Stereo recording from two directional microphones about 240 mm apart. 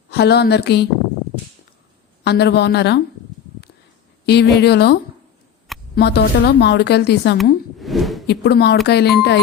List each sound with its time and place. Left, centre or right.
0.1 s a woman's voice: left
2.2 s a woman's voice: left
4.3 s a woman's voice: left
6.0 s a woman's voice: left
7.8 s a sound: centre
8.3 s a woman's voice: left